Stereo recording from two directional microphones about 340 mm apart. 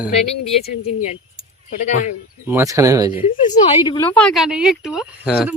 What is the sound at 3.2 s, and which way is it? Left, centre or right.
Speech, left.